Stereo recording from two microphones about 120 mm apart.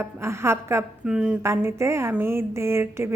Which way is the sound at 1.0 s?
5° right (ahead or behind).